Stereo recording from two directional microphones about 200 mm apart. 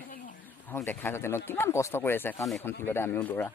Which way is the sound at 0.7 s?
10° left (ahead or behind).